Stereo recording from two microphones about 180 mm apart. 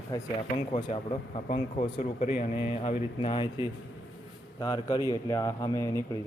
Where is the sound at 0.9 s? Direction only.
40° left (ahead or behind); by 6.0 s 15° left (ahead or behind).